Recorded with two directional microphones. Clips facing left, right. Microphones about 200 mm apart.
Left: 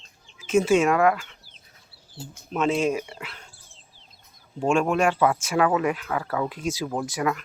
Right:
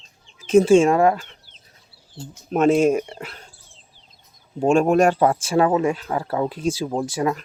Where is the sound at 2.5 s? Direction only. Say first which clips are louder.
Right 7 dB; 50° right (ahead or behind).